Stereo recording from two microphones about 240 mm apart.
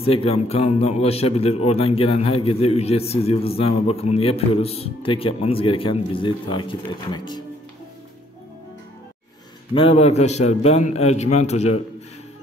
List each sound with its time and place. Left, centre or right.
0.0 s a man's voice: left
9.8 s a man's voice: left